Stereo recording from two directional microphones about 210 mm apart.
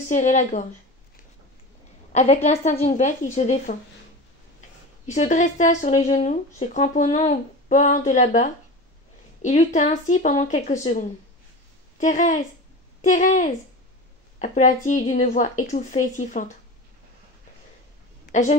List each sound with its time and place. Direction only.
0.1 s speech: 35° left (ahead or behind)
2.1 s speech: 30° left (ahead or behind)
5.0 s speech: 35° left (ahead or behind)
18.2 s a woman's voice: 40° left (ahead or behind)